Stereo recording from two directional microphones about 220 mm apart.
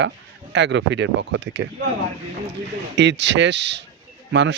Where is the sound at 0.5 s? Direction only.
55° right (ahead or behind).